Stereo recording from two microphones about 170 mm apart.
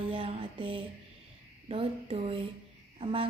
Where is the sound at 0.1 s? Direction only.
35° right (ahead or behind).